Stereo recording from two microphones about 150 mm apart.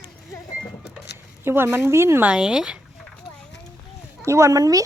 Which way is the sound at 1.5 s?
15° right (ahead or behind).